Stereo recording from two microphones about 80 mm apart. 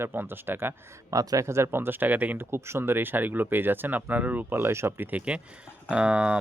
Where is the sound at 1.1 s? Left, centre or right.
Right; by 6.4 s centre.